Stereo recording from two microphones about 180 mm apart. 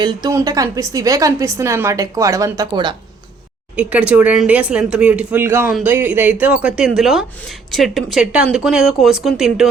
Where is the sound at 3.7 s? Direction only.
5° right (ahead or behind).